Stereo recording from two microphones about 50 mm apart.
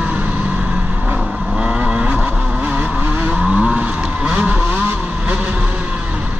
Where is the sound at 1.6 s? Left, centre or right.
Right.